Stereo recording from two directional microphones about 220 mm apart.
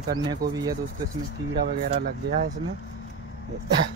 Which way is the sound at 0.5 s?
15° right (ahead or behind).